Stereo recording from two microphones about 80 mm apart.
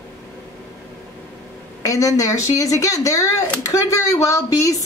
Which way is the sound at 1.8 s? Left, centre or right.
Left.